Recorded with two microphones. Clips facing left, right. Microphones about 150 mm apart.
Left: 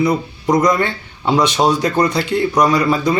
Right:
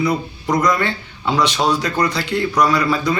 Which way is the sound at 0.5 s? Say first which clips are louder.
Left 3 dB; 20° left (ahead or behind).